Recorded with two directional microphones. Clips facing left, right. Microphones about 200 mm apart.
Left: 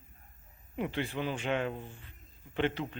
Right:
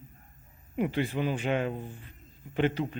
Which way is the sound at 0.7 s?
15° right (ahead or behind).